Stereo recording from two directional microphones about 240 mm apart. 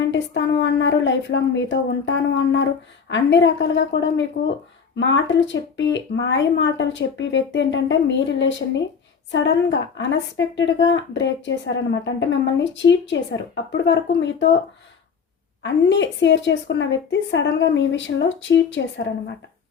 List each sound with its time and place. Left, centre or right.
0.0 s speech: left
15.6 s speech: left